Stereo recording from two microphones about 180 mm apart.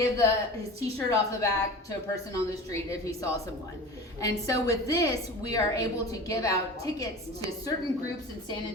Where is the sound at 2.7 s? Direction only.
15° left (ahead or behind).